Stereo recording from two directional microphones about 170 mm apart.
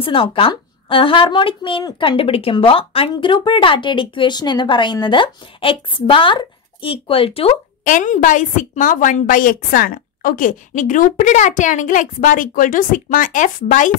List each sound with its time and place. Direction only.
0.0 s speech: 30° left (ahead or behind)
7.8 s a woman's voice: 50° left (ahead or behind)